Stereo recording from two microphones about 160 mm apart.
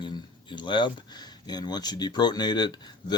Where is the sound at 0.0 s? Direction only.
30° left (ahead or behind).